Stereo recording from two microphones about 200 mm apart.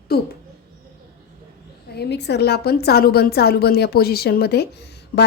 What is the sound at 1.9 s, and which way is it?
A woman's voice, 55° left (ahead or behind).